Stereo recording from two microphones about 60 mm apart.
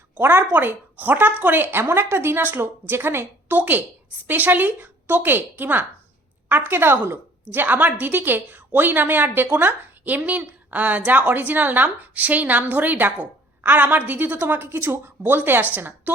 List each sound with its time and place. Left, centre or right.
0.2 s a woman's voice: right
3.6 s a woman's voice: right